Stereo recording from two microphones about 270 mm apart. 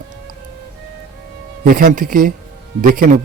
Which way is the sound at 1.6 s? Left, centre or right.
Right.